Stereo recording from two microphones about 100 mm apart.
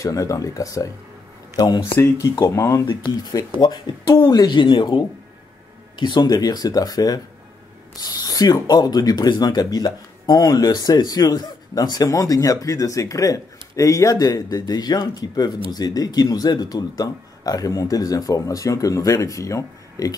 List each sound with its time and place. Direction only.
0.0 s speech: 35° left (ahead or behind)
2.0 s speech: 25° left (ahead or behind)